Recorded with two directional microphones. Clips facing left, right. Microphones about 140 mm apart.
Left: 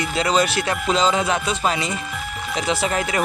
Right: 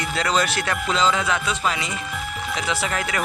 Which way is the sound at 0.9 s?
20° left (ahead or behind).